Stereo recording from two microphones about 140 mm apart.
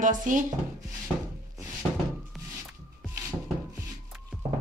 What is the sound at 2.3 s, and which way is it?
Music, centre (ahead or behind).